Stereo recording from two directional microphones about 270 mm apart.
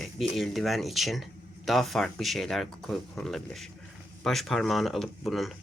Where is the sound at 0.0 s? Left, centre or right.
Centre.